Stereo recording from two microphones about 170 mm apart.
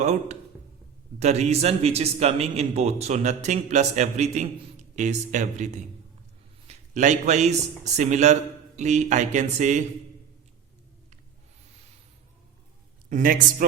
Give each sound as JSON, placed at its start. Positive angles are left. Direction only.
{"t": 0.0, "sound": "a man's voice", "side_deg": -40}
{"t": 13.1, "sound": "a man's voice", "side_deg": -50}